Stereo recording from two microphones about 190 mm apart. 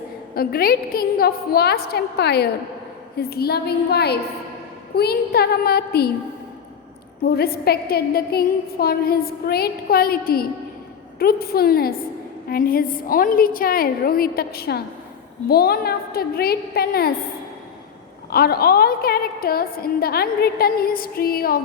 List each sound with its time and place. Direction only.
0.3 s a woman's voice: 50° left (ahead or behind)
7.3 s a woman's voice: 55° left (ahead or behind)
18.3 s a woman's voice: 55° left (ahead or behind)